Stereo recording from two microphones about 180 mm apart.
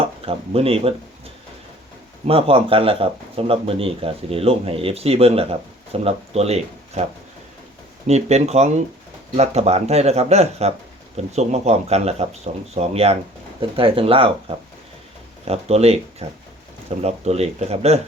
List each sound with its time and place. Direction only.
0.0 s speech: 30° right (ahead or behind)
2.2 s speech: 30° right (ahead or behind)
8.0 s speech: 35° right (ahead or behind)